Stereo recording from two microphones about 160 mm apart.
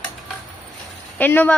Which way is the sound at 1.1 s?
10° left (ahead or behind).